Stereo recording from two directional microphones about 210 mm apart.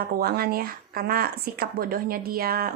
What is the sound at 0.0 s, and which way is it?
Speech, 45° right (ahead or behind).